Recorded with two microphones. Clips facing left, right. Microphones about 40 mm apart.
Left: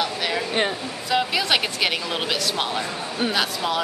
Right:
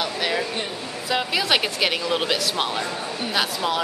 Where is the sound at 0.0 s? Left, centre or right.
Centre.